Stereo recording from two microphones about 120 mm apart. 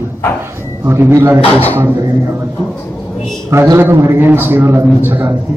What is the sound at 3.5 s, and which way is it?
A man's voice, 20° right (ahead or behind).